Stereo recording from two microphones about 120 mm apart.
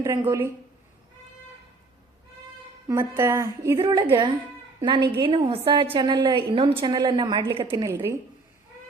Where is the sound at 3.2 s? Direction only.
25° right (ahead or behind).